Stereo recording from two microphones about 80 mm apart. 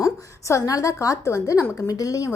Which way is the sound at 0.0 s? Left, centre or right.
Left.